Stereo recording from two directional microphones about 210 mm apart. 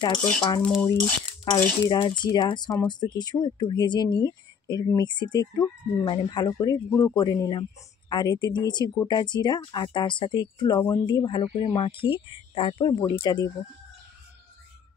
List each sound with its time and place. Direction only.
0.6 s cutlery: centre (ahead or behind)
1.4 s speech: 20° left (ahead or behind)